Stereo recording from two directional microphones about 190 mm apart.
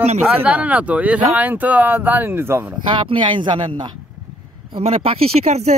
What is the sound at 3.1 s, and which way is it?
Speech, 25° right (ahead or behind).